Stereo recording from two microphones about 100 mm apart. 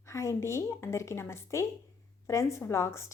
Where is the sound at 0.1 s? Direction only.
30° left (ahead or behind).